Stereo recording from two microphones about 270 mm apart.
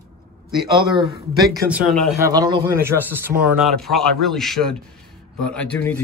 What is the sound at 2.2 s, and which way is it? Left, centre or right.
A man's voice, centre.